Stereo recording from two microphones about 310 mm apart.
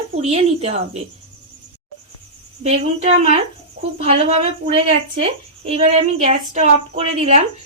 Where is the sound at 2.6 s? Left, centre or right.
Right.